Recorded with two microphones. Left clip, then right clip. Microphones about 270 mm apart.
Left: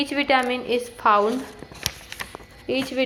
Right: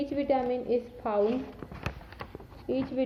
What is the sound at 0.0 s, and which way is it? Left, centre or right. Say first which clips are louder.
A woman's voice: left 8 dB; centre.